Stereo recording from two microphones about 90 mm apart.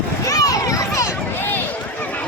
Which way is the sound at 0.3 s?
40° left (ahead or behind).